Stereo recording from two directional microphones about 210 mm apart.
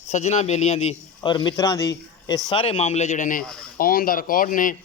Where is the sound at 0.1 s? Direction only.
30° left (ahead or behind).